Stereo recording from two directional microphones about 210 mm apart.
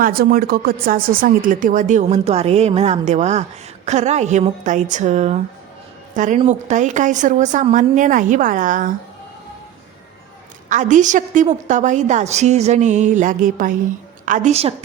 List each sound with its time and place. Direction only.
0.0 s a woman's voice: 45° right (ahead or behind)
10.7 s a woman's voice: 35° right (ahead or behind)